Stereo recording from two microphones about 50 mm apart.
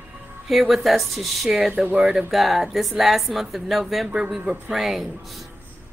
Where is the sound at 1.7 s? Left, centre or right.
Right.